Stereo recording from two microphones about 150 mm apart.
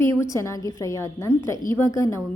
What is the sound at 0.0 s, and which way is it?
A woman's voice, 20° left (ahead or behind).